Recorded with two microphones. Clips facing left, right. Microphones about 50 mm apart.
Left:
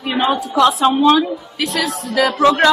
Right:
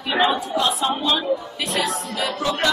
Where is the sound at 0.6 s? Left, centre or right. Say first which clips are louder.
Left 13 dB; left.